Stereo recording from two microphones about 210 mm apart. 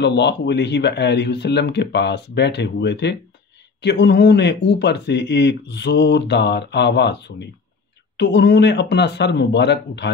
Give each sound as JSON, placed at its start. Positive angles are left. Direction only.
{"t": 0.0, "sound": "speech", "side_deg": 55}